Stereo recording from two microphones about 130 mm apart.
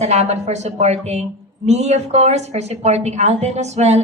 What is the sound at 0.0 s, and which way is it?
A woman's voice, 60° right (ahead or behind).